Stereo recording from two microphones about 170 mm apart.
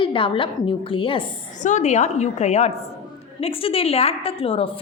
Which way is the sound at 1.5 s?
45° left (ahead or behind).